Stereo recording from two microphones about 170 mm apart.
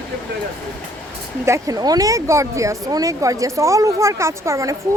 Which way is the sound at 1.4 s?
20° right (ahead or behind).